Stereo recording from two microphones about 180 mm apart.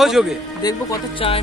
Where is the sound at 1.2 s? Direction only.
30° left (ahead or behind).